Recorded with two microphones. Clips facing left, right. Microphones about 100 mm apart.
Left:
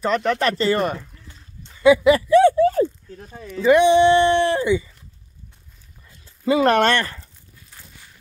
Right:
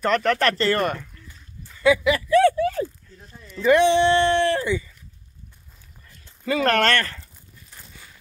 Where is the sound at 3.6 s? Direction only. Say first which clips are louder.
Left 3 dB; 15° left (ahead or behind).